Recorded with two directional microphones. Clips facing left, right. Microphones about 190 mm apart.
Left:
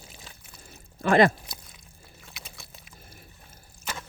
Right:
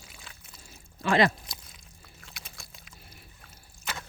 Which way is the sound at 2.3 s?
Centre (ahead or behind).